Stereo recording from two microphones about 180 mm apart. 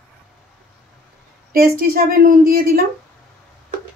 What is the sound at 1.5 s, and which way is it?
A woman's voice, 55° right (ahead or behind).